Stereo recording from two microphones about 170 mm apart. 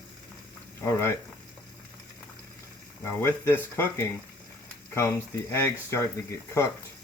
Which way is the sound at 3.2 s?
15° left (ahead or behind).